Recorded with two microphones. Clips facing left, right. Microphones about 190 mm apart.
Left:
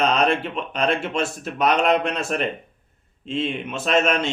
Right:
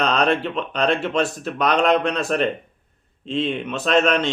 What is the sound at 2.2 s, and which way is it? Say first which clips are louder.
Speech: right 4 dB; 40° right (ahead or behind).